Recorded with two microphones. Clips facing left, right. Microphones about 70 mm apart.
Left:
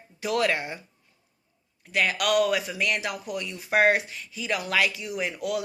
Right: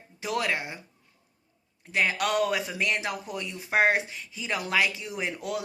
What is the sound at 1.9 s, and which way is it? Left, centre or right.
A woman's voice, right.